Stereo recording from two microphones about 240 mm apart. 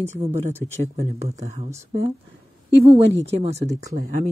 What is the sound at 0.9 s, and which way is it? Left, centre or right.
Speech, right.